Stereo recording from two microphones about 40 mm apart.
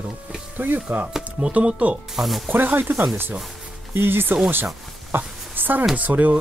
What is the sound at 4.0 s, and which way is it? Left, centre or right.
Speech, right.